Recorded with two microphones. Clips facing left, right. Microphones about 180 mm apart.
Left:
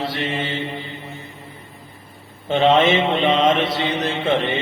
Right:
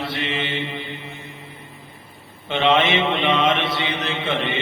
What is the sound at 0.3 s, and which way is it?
Mantra, 45° left (ahead or behind).